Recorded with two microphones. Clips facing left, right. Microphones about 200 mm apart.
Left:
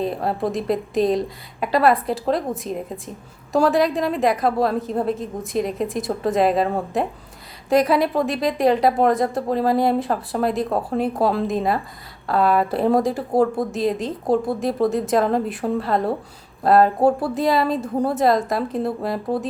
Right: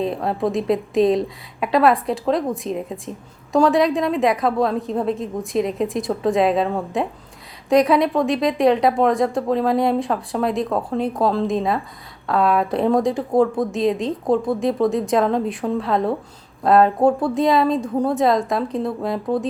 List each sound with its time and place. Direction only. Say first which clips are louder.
0.0 s a woman's voice: right 1 dB; centre (ahead or behind)